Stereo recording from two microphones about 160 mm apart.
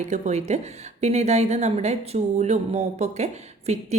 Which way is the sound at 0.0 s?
45° right (ahead or behind).